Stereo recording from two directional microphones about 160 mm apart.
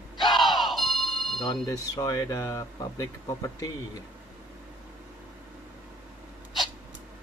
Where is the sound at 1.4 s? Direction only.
25° left (ahead or behind).